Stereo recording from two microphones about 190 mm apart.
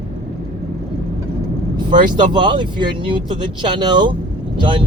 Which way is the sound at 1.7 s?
25° right (ahead or behind).